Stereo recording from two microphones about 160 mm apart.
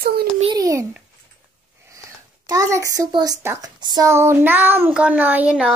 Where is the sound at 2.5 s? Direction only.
20° right (ahead or behind).